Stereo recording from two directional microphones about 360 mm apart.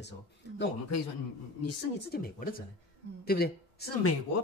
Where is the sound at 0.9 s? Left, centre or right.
Left.